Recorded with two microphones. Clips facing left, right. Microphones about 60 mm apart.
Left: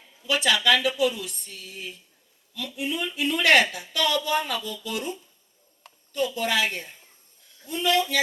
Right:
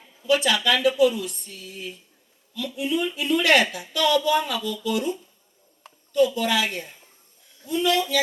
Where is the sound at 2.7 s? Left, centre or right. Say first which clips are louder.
Right 4 dB; left.